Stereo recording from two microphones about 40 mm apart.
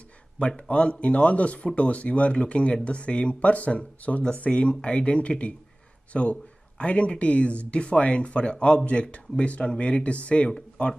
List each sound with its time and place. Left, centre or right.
0.6 s speech: left